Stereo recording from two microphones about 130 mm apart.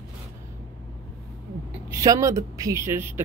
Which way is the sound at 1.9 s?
25° right (ahead or behind).